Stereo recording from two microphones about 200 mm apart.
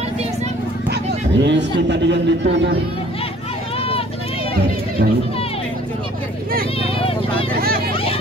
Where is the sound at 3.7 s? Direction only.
30° left (ahead or behind).